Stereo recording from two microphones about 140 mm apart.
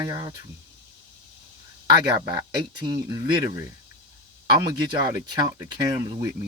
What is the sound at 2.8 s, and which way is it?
Speech, 30° right (ahead or behind).